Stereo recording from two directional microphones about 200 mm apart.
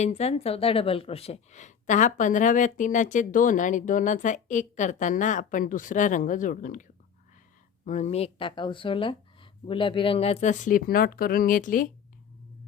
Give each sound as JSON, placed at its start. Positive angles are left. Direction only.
{"t": 0.0, "sound": "a woman's voice", "side_deg": 35}